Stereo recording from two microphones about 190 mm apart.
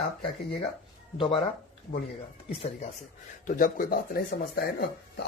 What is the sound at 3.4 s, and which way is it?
Speech, 45° left (ahead or behind).